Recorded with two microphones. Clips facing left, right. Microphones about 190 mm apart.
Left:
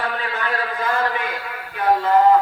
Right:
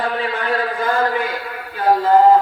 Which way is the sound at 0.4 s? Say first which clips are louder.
Right 3 dB; 35° right (ahead or behind).